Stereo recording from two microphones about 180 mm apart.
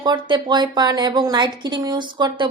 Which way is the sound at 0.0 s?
25° right (ahead or behind).